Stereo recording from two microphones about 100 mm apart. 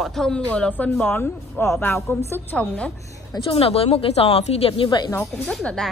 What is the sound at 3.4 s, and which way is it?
A woman's voice, 75° left (ahead or behind).